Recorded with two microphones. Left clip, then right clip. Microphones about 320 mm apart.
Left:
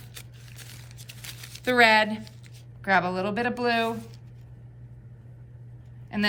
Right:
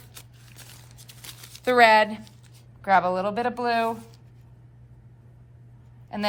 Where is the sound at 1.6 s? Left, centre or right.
Centre.